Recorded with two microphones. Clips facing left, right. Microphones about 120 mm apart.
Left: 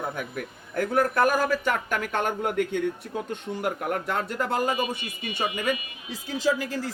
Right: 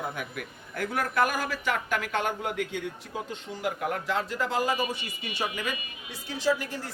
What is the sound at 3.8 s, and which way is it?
A man's voice, 50° left (ahead or behind).